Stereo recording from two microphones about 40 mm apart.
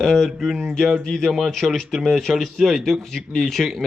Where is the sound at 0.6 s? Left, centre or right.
Centre.